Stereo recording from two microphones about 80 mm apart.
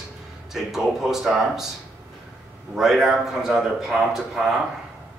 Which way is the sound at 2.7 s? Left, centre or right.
Centre.